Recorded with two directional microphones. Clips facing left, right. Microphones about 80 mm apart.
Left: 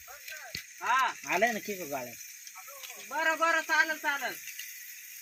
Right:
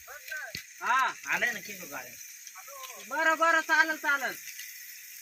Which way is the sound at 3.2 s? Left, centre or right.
Right.